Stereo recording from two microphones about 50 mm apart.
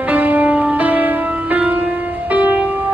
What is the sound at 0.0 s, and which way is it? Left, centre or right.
Music, right.